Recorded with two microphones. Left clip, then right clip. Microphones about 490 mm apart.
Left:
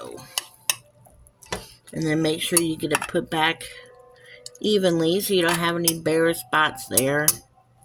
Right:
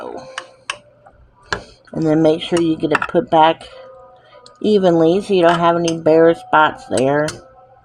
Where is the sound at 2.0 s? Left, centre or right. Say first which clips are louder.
Right 9 dB; left.